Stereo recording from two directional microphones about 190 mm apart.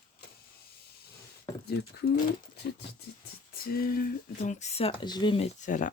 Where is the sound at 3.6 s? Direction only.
50° left (ahead or behind).